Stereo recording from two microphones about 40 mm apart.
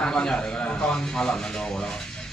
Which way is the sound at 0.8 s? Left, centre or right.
Centre.